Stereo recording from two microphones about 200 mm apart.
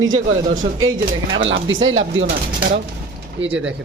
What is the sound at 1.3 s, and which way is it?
Speech, 70° right (ahead or behind).